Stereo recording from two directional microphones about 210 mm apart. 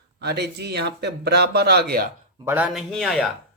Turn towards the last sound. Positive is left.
turn(degrees=0)  # may be behind; listen again after turning